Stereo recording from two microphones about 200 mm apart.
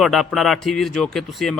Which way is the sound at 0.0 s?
Centre (ahead or behind).